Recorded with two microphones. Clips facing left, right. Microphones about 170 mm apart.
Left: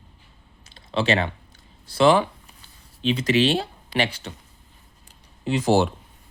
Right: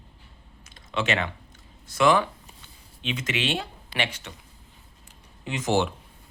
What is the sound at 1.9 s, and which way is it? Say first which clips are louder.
Speech: left 3 dB; 30° left (ahead or behind).